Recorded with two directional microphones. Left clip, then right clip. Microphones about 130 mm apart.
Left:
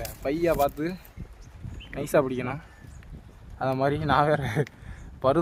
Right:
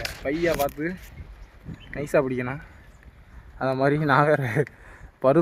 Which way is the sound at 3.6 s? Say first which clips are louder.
Right 3 dB; 90° right.